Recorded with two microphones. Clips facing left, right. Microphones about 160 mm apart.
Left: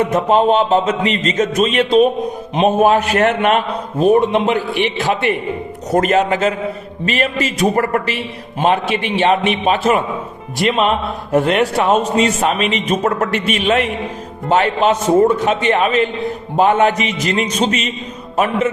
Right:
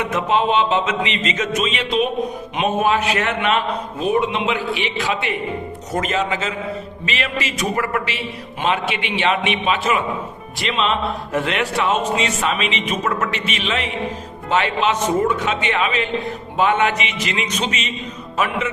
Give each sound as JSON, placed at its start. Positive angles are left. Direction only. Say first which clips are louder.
{"t": 0.0, "sound": "a man's voice", "louder": "left 6 dB", "side_deg": 45}